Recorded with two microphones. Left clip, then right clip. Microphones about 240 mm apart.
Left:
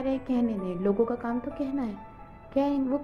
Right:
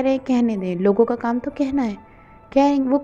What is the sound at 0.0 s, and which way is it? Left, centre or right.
A woman's voice, right.